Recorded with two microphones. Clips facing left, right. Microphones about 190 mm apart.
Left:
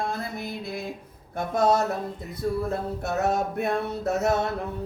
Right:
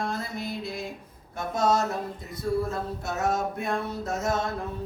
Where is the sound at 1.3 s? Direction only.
55° left (ahead or behind).